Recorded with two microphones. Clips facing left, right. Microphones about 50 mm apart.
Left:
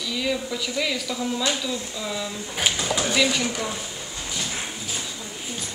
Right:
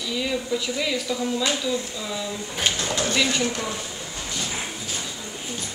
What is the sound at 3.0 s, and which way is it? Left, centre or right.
Speech, centre.